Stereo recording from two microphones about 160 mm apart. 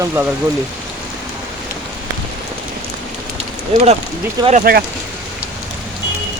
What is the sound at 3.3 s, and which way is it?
Rain on surface, 40° right (ahead or behind).